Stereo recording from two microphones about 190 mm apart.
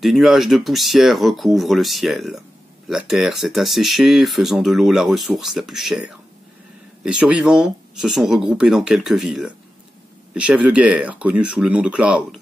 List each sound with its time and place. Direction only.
0.0 s speech: centre (ahead or behind)